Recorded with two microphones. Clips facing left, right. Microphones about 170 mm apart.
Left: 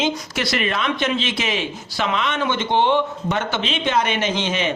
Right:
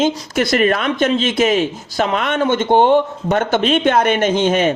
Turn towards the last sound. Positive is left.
turn(degrees=-50)  # may be behind; listen again after turning